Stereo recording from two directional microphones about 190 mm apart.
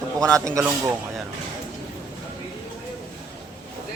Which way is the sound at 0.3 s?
15° right (ahead or behind).